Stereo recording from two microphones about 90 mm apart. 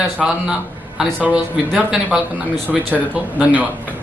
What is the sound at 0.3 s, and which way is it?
A man's voice, 5° right (ahead or behind).